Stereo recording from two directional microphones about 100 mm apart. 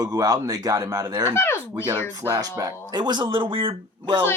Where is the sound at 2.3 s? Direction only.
40° right (ahead or behind); by 4.2 s 55° right (ahead or behind).